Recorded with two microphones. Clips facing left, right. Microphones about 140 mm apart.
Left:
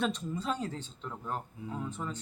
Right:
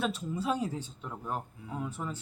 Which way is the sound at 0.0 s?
10° right (ahead or behind).